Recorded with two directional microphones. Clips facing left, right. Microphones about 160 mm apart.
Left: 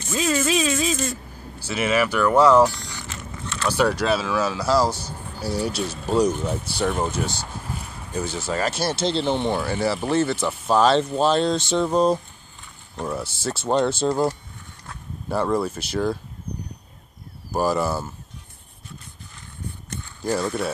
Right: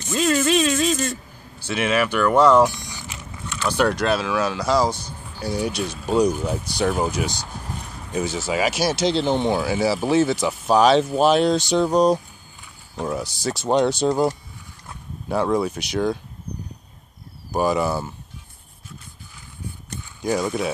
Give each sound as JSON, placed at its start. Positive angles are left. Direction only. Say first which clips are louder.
{"t": 0.1, "sound": "speech", "louder": "right 3 dB", "side_deg": 0}
{"t": 2.6, "sound": "vehicle", "louder": "even", "side_deg": -20}
{"t": 3.5, "sound": "speech", "louder": "even", "side_deg": 5}
{"t": 6.0, "sound": "speech", "louder": "right 1 dB", "side_deg": -10}
{"t": 6.4, "sound": "speech", "louder": "right 2 dB", "side_deg": 0}
{"t": 17.5, "sound": "speech", "louder": "right 1 dB", "side_deg": 0}
{"t": 20.0, "sound": "a sound", "louder": "right 1 dB", "side_deg": -10}